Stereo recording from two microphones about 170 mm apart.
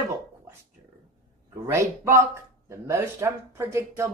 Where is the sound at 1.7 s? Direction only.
15° right (ahead or behind).